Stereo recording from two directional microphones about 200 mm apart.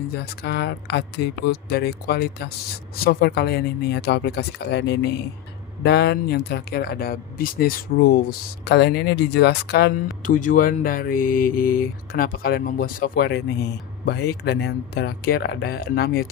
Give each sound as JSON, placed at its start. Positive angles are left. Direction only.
{"t": 0.2, "sound": "speech", "side_deg": 55}
{"t": 10.2, "sound": "speech", "side_deg": 40}